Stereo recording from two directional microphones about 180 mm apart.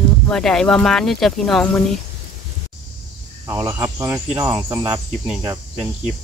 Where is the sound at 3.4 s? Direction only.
15° right (ahead or behind).